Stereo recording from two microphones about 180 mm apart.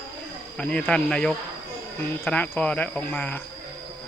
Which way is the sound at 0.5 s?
5° left (ahead or behind).